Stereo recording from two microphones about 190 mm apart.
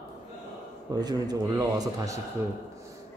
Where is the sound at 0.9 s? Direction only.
20° right (ahead or behind).